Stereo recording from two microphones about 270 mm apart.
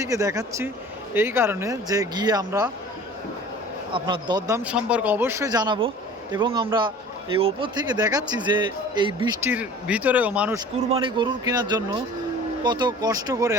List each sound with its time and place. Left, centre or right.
0.0 s speech: centre
3.9 s speech: centre
10.8 s speech: centre